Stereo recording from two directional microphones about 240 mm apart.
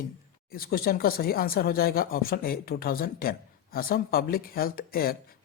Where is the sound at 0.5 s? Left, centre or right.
Left.